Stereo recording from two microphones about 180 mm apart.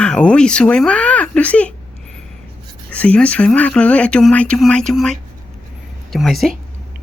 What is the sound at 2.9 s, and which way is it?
Speech, 5° left (ahead or behind).